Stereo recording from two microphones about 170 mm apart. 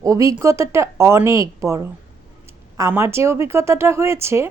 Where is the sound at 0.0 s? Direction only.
20° right (ahead or behind).